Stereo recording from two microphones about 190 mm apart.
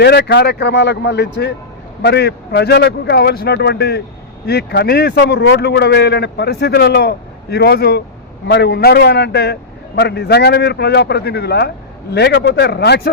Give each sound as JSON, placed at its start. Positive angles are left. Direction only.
{"t": 0.0, "sound": "speech", "side_deg": 60}